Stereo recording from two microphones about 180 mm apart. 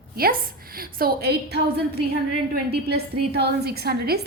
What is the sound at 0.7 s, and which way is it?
A woman's voice, 55° right (ahead or behind).